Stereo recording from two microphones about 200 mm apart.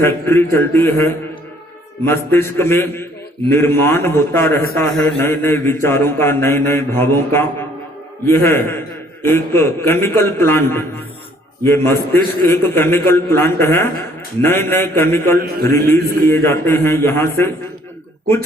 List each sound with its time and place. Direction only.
0.0 s mantra: 10° left (ahead or behind)
15.4 s a man's voice: 50° right (ahead or behind)
16.2 s mantra: 15° left (ahead or behind)